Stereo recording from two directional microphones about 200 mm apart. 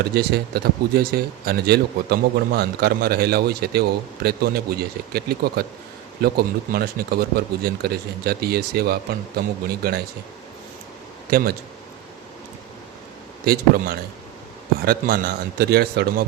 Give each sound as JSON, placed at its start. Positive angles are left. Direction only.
{"t": 0.0, "sound": "speech", "side_deg": -55}
{"t": 11.3, "sound": "speech", "side_deg": -50}
{"t": 13.4, "sound": "speech", "side_deg": -50}